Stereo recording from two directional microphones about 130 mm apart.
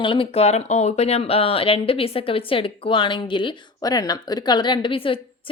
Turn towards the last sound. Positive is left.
turn(degrees=45)  # may be behind; listen again after turning